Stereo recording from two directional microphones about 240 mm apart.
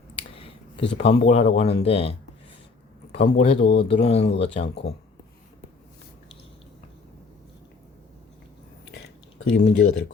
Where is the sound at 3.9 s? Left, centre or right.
Left.